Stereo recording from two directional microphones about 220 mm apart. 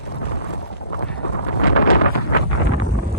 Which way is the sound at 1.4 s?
40° left (ahead or behind).